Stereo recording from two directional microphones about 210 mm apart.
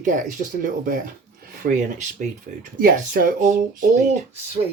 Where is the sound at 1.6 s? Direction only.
45° right (ahead or behind).